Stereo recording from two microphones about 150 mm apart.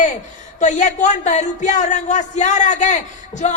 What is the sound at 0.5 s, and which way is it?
Speech, 55° left (ahead or behind).